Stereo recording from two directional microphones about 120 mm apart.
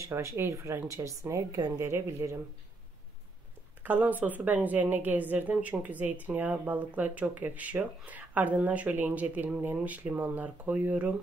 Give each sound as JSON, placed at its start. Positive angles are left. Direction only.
{"t": 0.0, "sound": "speech", "side_deg": -25}
{"t": 3.8, "sound": "speech", "side_deg": -15}